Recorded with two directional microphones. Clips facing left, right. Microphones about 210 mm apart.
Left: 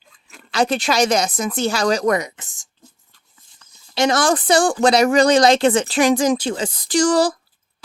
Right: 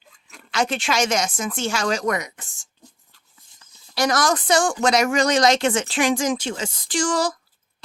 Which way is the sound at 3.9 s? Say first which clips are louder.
Left 4 dB; 25° left (ahead or behind).